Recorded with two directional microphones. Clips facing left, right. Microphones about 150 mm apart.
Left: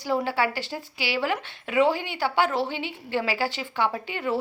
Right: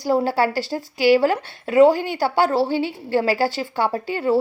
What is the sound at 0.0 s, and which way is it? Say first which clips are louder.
A woman's voice: right 6 dB; 40° right (ahead or behind).